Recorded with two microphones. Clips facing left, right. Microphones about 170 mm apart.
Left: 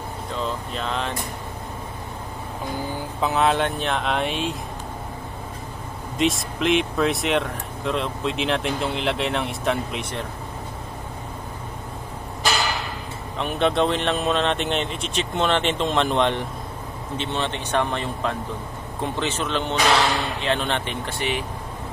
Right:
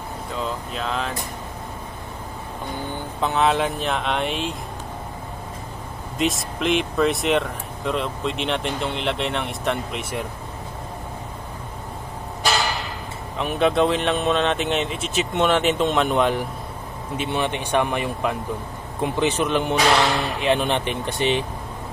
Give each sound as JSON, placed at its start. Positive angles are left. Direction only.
{"t": 0.4, "sound": "speech", "side_deg": 0}
{"t": 3.2, "sound": "speech", "side_deg": 0}
{"t": 6.1, "sound": "speech", "side_deg": 0}
{"t": 13.4, "sound": "speech", "side_deg": 0}